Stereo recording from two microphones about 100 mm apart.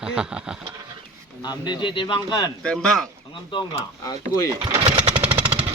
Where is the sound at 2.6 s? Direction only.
5° left (ahead or behind).